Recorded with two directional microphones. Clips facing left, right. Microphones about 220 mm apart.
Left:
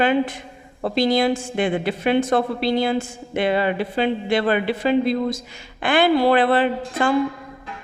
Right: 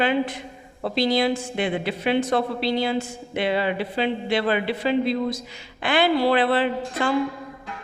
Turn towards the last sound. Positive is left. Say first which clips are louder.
# left 3 dB
turn(degrees=50)  # may be behind; listen again after turning